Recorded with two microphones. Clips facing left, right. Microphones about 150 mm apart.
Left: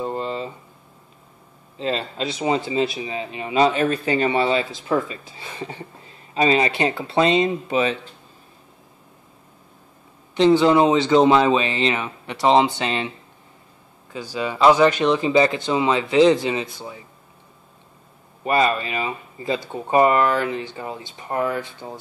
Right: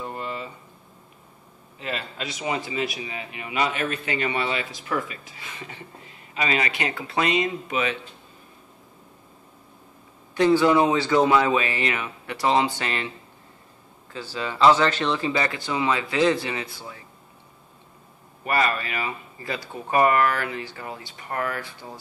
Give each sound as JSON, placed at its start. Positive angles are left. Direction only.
{"t": 0.0, "sound": "a sound", "side_deg": 25}
{"t": 1.8, "sound": "a man's voice", "side_deg": 30}
{"t": 10.3, "sound": "a man's voice", "side_deg": 20}
{"t": 14.1, "sound": "a man's voice", "side_deg": 15}
{"t": 18.4, "sound": "a man's voice", "side_deg": 20}